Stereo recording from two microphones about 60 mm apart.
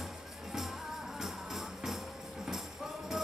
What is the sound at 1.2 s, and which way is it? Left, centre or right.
Music, centre.